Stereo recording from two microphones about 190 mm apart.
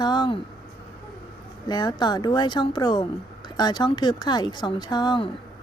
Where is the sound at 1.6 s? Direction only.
20° left (ahead or behind).